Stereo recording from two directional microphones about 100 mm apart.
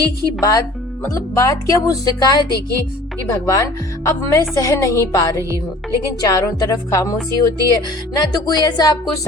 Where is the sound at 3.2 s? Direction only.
35° left (ahead or behind).